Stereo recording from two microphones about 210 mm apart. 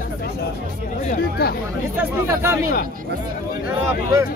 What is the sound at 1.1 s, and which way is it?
Speech, 50° left (ahead or behind).